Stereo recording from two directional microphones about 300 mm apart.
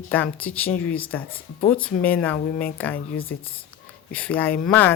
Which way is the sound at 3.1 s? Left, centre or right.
Left.